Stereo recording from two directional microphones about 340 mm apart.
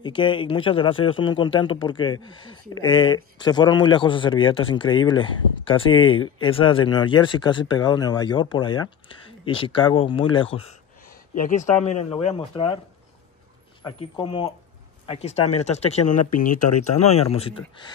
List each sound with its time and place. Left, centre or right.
0.0 s a man's voice: centre
11.8 s a man's voice: centre
13.8 s a man's voice: centre